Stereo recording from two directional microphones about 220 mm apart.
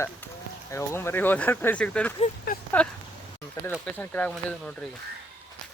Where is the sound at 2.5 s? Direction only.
40° left (ahead or behind).